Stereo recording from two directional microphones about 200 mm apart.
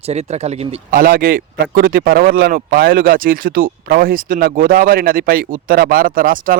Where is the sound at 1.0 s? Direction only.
45° right (ahead or behind).